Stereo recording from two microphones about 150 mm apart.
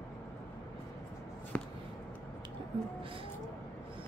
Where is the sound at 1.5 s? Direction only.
10° left (ahead or behind).